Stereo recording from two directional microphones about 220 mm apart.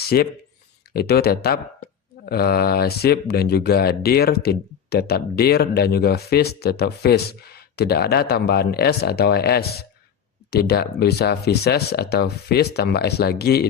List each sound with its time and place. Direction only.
0.0 s speech: 45° left (ahead or behind)